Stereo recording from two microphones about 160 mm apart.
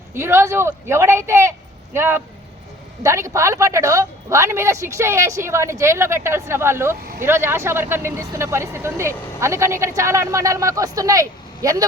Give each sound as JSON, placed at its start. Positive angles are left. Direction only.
{"t": 0.2, "sound": "speech", "side_deg": -15}